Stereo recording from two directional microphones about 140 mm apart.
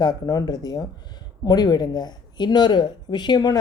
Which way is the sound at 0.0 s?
30° left (ahead or behind).